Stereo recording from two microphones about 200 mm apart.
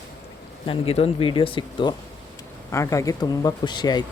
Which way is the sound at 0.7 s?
30° left (ahead or behind).